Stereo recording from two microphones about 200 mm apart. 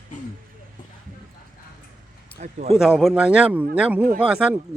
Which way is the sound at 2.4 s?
35° right (ahead or behind).